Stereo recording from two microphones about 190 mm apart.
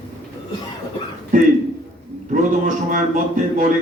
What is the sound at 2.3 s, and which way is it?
A man's voice, 45° right (ahead or behind).